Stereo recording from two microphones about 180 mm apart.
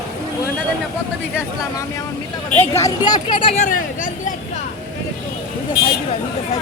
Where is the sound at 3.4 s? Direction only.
40° left (ahead or behind).